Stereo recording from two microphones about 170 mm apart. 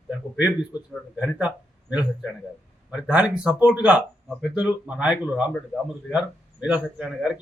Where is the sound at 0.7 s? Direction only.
25° left (ahead or behind).